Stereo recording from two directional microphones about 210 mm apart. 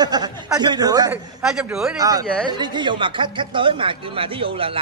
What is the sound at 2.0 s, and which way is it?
Speech, 15° right (ahead or behind).